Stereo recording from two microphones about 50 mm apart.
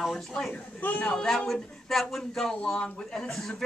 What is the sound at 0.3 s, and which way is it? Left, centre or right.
Speech, centre.